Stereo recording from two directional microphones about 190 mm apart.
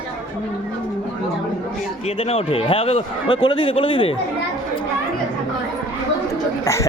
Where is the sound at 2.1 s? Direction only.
30° left (ahead or behind).